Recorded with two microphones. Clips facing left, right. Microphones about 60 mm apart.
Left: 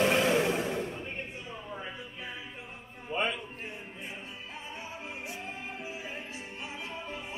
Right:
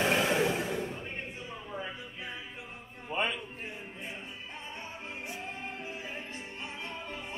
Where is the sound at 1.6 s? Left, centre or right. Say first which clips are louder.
Right 2 dB; centre.